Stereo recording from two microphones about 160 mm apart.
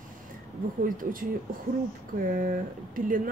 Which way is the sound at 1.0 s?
60° right (ahead or behind).